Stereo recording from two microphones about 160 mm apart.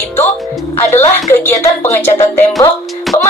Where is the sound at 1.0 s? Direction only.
15° left (ahead or behind).